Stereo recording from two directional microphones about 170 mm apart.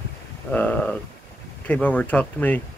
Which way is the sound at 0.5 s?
10° left (ahead or behind).